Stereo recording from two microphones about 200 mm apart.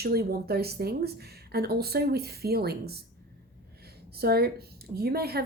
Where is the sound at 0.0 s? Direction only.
50° right (ahead or behind).